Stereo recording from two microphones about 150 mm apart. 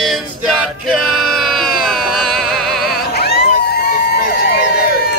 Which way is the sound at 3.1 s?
90° left.